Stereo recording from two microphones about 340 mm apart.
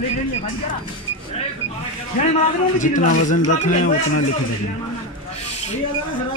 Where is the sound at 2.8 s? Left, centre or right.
Left.